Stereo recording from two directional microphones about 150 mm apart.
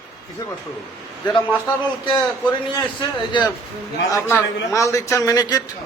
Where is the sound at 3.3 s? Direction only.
30° left (ahead or behind).